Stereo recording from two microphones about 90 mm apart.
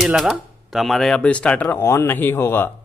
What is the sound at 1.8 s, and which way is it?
Speech, 30° left (ahead or behind).